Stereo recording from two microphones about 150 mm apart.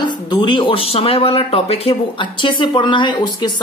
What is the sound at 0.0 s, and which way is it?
Speech, 30° left (ahead or behind).